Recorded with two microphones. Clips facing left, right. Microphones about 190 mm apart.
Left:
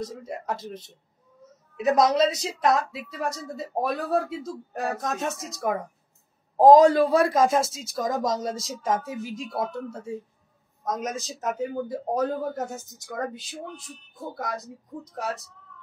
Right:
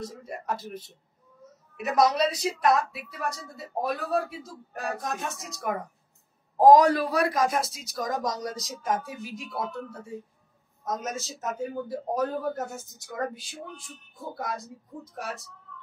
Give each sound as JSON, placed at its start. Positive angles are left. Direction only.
{"t": 0.0, "sound": "speech", "side_deg": 20}